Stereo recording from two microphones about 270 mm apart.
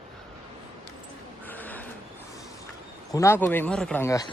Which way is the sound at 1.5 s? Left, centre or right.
Centre.